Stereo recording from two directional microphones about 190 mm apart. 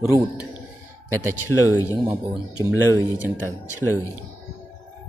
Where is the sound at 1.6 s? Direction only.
15° left (ahead or behind).